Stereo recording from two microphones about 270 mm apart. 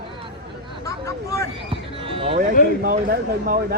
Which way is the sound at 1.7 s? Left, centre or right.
Centre.